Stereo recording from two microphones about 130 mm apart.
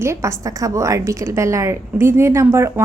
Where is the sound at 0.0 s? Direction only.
20° right (ahead or behind).